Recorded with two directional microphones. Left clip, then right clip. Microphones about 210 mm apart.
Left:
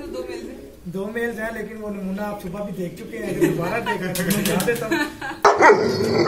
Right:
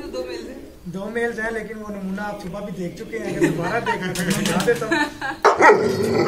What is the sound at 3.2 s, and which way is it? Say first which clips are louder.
A man's voice: even; 10° left (ahead or behind).